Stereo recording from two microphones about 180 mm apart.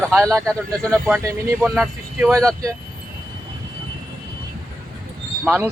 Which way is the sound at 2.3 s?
20° right (ahead or behind).